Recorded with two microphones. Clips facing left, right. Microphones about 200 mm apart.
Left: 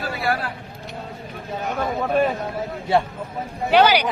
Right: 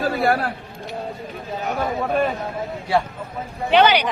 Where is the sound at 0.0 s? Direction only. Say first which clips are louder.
Right 5 dB; 50° right (ahead or behind).